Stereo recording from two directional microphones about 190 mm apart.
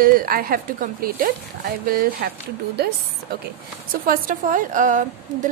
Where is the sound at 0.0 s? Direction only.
50° right (ahead or behind).